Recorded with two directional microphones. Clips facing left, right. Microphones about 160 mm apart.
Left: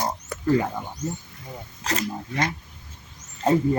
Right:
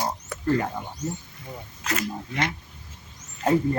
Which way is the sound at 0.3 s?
Centre (ahead or behind).